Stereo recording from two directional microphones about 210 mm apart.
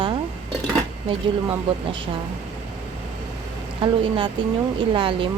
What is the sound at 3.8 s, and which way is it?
Speech, 25° right (ahead or behind).